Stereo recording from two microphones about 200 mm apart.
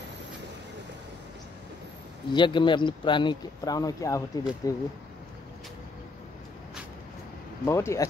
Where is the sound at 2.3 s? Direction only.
25° left (ahead or behind).